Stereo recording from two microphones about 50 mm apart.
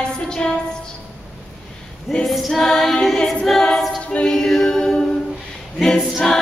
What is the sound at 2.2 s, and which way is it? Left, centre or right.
Female singing, centre.